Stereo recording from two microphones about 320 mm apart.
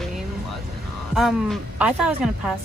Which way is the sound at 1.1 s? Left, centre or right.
Centre.